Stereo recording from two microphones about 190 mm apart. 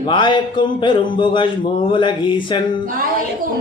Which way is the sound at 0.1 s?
25° left (ahead or behind).